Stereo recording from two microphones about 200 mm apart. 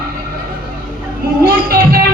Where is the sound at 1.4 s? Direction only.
50° right (ahead or behind).